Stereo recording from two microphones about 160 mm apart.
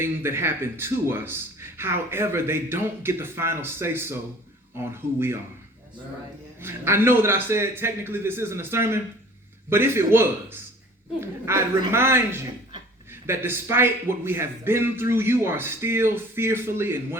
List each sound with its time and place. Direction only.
0.0 s speech: 15° right (ahead or behind)
6.6 s speech: 15° right (ahead or behind)